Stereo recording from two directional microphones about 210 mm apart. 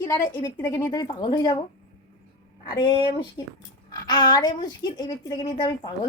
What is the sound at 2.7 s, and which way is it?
A woman's voice, 20° left (ahead or behind).